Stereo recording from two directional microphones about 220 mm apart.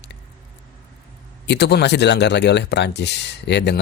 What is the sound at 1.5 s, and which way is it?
Speech, 50° left (ahead or behind).